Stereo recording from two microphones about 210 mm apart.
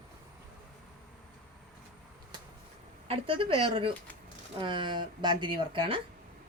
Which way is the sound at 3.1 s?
25° right (ahead or behind).